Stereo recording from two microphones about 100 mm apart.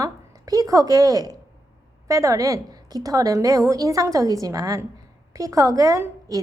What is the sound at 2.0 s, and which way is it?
A woman's voice, 30° right (ahead or behind).